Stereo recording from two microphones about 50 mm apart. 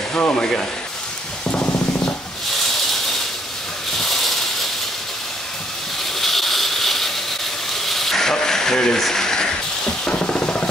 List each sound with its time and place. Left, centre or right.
0.1 s speech: left
0.4 s rub: centre
1.5 s a sound: left
6.1 s a sound: centre
7.7 s sizzle: centre
9.0 s music: centre; by 10.7 s left